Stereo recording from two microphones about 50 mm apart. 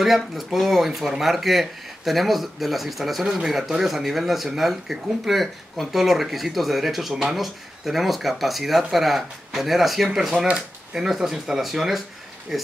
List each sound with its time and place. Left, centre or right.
0.0 s speech: centre